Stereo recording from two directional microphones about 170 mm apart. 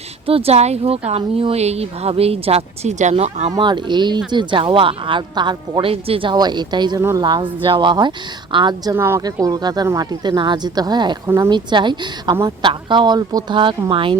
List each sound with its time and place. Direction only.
0.3 s speech: 35° right (ahead or behind)
3.5 s speech: 25° right (ahead or behind)
11.3 s speech: 15° right (ahead or behind)
11.5 s speech: 25° right (ahead or behind)